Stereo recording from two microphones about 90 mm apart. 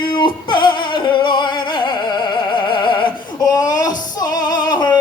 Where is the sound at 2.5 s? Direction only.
60° left (ahead or behind).